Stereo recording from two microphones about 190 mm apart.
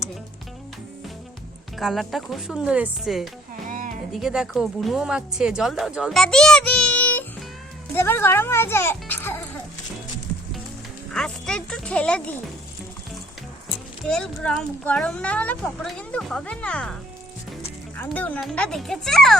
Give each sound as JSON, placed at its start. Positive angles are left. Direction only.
{"t": 1.8, "sound": "speech", "side_deg": 0}
{"t": 3.7, "sound": "music", "side_deg": -45}
{"t": 4.1, "sound": "speech", "side_deg": 0}
{"t": 11.1, "sound": "speech", "side_deg": 5}
{"t": 14.0, "sound": "speech", "side_deg": 5}